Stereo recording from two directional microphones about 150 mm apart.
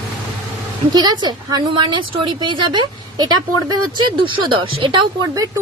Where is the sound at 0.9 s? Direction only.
25° right (ahead or behind).